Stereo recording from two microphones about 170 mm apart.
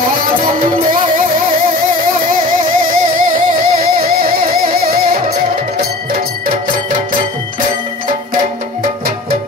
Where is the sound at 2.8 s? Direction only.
55° right (ahead or behind).